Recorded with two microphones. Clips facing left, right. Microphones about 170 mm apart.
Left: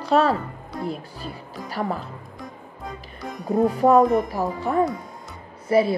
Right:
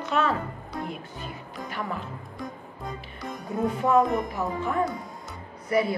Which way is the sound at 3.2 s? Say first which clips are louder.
Left 7 dB; centre (ahead or behind).